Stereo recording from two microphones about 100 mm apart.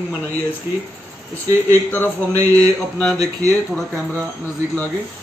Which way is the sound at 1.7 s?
20° left (ahead or behind).